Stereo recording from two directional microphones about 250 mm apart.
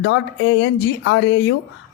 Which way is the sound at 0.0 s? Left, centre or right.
Left.